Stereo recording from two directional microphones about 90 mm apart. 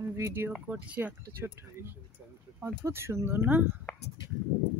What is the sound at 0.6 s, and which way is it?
Speech, 15° right (ahead or behind).